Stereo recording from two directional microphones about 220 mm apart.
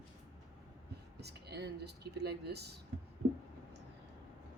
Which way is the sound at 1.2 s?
50° right (ahead or behind).